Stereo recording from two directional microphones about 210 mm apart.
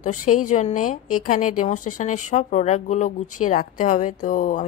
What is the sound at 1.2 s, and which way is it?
A woman's voice, 35° left (ahead or behind).